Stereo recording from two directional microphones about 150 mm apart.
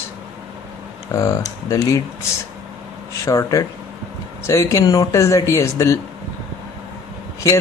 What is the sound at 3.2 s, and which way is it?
Speech, 20° left (ahead or behind).